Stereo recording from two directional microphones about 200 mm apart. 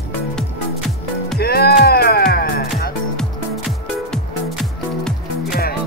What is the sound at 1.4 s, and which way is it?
Music, 50° left (ahead or behind).